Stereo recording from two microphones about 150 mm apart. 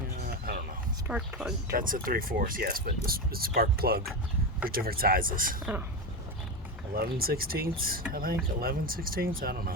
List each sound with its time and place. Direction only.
1.0 s speech: 5° right (ahead or behind)
1.7 s speech: 70° right (ahead or behind); by 4.0 s 90° right
4.7 s speech: 75° right (ahead or behind)
6.9 s speech: 85° right